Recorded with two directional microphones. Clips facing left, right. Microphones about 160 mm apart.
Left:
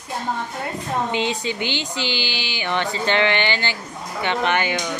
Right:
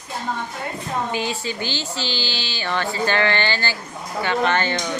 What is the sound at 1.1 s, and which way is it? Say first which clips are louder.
Speech: left 2 dB; 20° left (ahead or behind).